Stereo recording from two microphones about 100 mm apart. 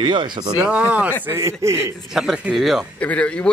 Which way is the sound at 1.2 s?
30° right (ahead or behind).